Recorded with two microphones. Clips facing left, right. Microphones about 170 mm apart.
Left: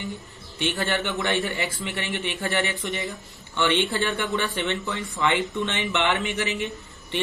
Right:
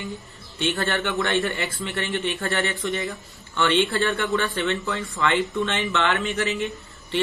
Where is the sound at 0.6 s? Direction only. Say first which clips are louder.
Right 1 dB; 15° left (ahead or behind).